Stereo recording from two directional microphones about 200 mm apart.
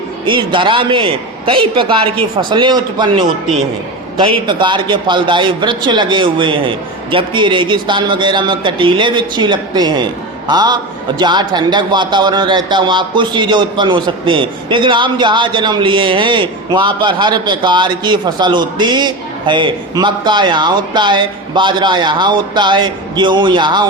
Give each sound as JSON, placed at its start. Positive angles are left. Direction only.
{"t": 0.3, "sound": "a man's voice", "side_deg": -25}